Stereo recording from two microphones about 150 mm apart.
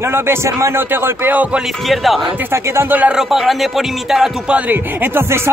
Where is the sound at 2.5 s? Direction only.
20° right (ahead or behind).